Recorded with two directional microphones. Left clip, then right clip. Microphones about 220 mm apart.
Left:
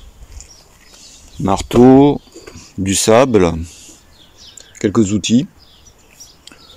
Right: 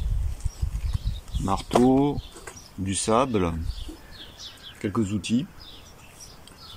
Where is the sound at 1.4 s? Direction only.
55° left (ahead or behind).